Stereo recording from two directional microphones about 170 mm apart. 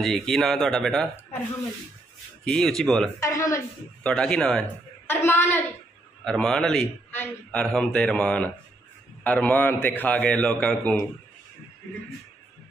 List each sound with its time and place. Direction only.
0.0 s a man's voice: centre (ahead or behind)
2.4 s a man's voice: 5° left (ahead or behind)
3.2 s a woman's voice: 20° left (ahead or behind)
4.0 s a man's voice: 5° left (ahead or behind)